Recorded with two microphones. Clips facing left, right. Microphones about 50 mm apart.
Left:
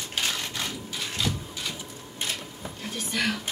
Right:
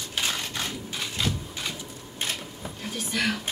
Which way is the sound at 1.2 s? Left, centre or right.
Right.